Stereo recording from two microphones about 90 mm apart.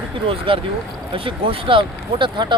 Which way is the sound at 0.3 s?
90° right.